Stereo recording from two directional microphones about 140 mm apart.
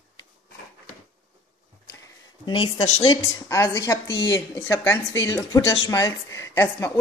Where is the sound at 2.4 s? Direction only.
30° left (ahead or behind).